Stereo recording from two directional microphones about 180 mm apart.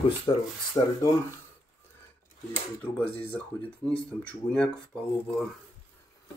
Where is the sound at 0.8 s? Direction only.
15° left (ahead or behind).